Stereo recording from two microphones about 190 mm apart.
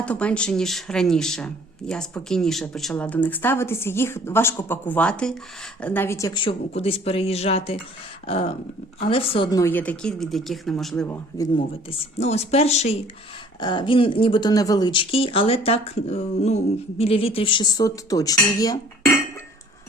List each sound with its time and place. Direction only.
0.0 s speech: 5° left (ahead or behind)
11.5 s speech: 30° left (ahead or behind)
13.6 s speech: 25° left (ahead or behind)